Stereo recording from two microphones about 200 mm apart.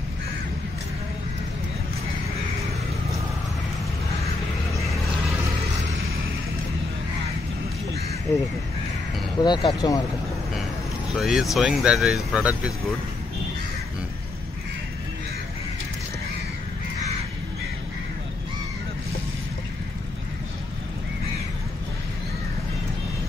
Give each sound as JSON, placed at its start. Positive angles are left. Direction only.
{"t": 9.4, "sound": "speech", "side_deg": 20}
{"t": 11.1, "sound": "speech", "side_deg": 0}